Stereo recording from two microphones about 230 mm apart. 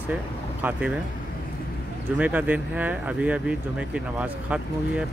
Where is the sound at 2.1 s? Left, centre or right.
Centre.